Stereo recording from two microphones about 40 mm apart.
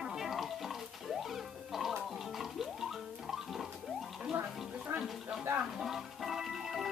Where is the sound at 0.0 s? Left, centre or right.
Centre.